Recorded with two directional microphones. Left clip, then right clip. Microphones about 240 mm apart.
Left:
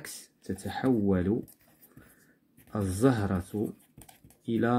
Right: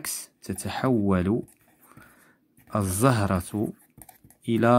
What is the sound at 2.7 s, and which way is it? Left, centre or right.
Speech, right.